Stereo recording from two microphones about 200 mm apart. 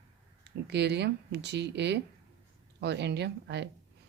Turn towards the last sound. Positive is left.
turn(degrees=-60)  # may be behind; listen again after turning